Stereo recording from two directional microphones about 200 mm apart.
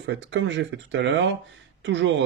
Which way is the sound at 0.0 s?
60° right (ahead or behind).